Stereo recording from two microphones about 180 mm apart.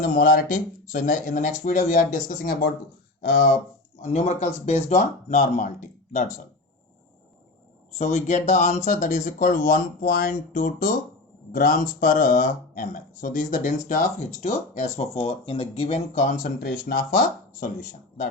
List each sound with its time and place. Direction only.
0.1 s speech: 50° left (ahead or behind)
4.0 s speech: 40° left (ahead or behind)
7.9 s speech: 40° left (ahead or behind)